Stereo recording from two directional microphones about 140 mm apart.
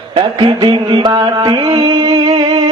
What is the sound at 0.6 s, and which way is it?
Music, 35° right (ahead or behind).